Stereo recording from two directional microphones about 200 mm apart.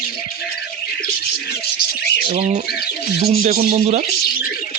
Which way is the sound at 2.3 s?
30° right (ahead or behind).